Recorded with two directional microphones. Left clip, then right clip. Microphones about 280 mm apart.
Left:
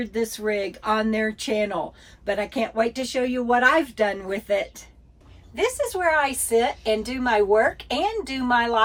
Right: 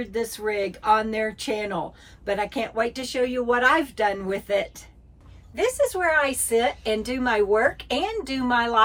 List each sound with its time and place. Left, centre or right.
0.0 s a woman's voice: centre